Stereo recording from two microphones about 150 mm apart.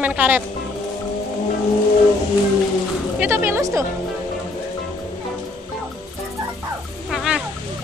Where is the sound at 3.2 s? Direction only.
15° right (ahead or behind).